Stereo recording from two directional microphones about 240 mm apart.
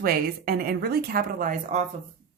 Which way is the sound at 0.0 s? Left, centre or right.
Right.